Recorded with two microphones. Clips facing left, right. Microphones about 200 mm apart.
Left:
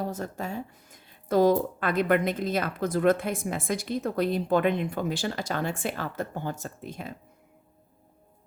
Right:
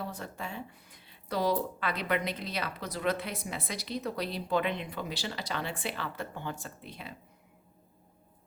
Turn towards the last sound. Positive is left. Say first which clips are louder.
# left 7 dB
turn(degrees=45)  # may be behind; listen again after turning